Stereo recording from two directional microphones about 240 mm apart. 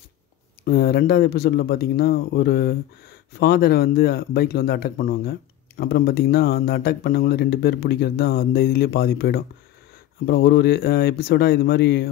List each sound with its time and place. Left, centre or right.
0.7 s speech: left